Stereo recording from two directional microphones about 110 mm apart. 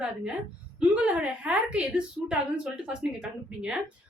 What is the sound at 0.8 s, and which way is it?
A woman's voice, 10° right (ahead or behind).